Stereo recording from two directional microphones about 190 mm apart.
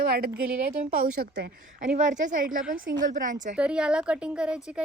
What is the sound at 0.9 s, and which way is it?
Speech, 55° right (ahead or behind).